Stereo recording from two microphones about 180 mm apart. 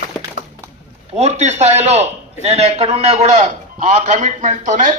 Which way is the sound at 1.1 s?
40° right (ahead or behind).